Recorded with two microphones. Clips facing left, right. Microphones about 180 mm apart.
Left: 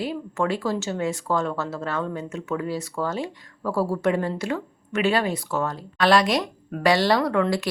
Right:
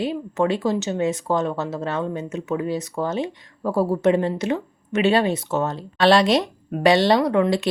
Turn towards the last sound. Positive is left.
turn(degrees=-20)  # may be behind; listen again after turning